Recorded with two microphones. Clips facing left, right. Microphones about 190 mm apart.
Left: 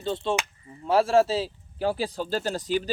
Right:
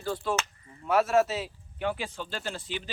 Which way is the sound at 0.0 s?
25° left (ahead or behind).